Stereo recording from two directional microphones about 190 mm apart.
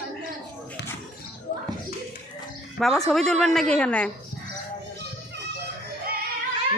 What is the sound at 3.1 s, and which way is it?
Speech, centre (ahead or behind).